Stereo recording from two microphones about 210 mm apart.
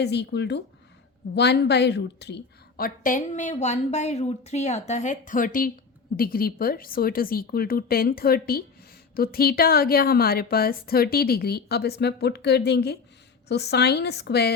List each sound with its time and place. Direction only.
0.0 s a woman's voice: 55° left (ahead or behind)